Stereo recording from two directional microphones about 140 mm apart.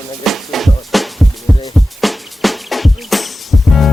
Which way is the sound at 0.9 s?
Centre (ahead or behind).